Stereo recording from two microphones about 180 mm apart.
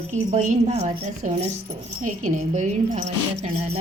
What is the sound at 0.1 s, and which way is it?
A woman's voice, 40° right (ahead or behind).